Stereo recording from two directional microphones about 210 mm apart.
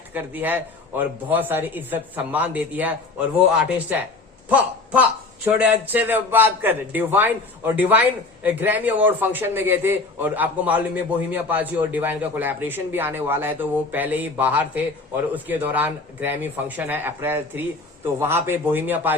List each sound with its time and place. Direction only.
0.1 s speech: 10° right (ahead or behind)
4.4 s a sound: 5° right (ahead or behind)
5.5 s speech: 10° right (ahead or behind)